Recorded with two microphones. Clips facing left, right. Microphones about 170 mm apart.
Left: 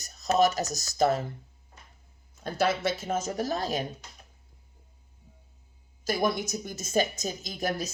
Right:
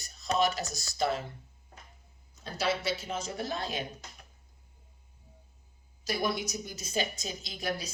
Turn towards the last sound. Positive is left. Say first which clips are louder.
# left 4 dB
turn(degrees=45)  # may be behind; listen again after turning